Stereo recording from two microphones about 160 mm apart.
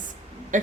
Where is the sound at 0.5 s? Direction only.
50° right (ahead or behind).